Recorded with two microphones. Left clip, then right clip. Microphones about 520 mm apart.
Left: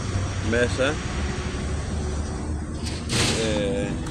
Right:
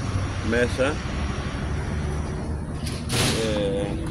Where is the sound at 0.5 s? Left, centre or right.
Right.